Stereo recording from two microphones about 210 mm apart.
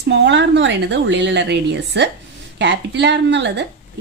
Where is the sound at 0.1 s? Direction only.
55° right (ahead or behind).